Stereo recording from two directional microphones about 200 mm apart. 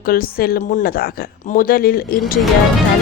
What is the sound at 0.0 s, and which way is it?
Speech, 45° left (ahead or behind).